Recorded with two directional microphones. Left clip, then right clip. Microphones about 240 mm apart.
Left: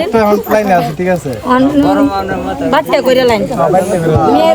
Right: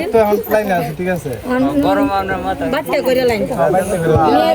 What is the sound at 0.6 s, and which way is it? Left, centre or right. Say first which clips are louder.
Speech: left 6 dB; left.